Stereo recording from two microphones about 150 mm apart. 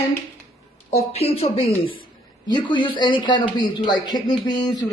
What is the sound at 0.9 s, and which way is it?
A man's voice, 40° left (ahead or behind).